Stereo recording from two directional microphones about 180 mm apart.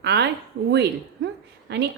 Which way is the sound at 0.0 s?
70° right (ahead or behind).